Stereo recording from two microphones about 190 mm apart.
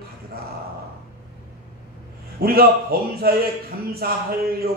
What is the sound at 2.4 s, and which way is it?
A man's voice, 55° right (ahead or behind).